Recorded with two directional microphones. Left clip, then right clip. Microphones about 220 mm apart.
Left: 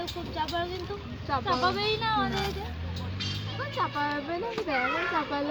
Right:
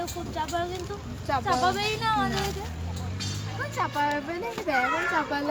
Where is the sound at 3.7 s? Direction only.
15° right (ahead or behind).